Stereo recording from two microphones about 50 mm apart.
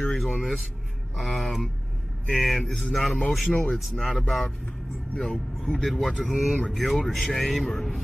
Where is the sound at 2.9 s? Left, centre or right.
Centre.